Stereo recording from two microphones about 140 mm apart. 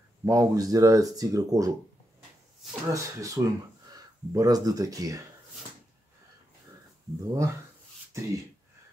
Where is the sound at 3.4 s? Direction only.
20° right (ahead or behind).